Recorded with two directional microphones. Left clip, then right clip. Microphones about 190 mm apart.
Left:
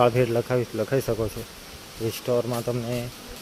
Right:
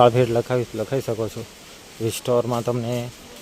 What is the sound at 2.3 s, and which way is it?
Speech, 30° right (ahead or behind).